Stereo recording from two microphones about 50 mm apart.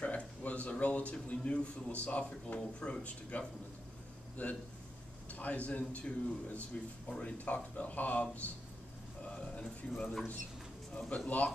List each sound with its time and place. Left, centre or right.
0.0 s a man's voice: left
4.4 s a man's voice: left
9.2 s a man's voice: centre